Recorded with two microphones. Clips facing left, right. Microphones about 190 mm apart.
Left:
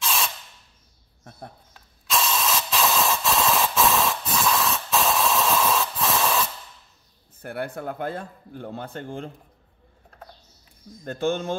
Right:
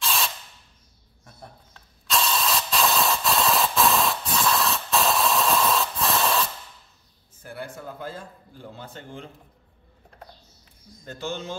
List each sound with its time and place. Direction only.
0.0 s spray: centre (ahead or behind)
2.1 s spray: centre (ahead or behind)
7.4 s a man's voice: 60° left (ahead or behind)
11.1 s speech: 55° left (ahead or behind)